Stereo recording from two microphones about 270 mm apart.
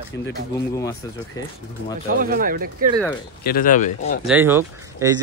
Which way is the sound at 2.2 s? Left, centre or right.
Right.